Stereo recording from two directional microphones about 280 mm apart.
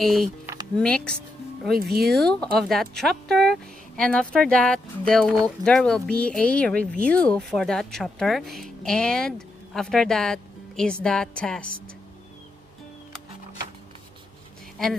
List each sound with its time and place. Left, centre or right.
0.0 s speech: centre
1.8 s speech: right
2.0 s speech: centre
14.8 s speech: centre